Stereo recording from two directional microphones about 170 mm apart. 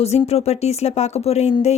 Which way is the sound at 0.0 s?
40° left (ahead or behind).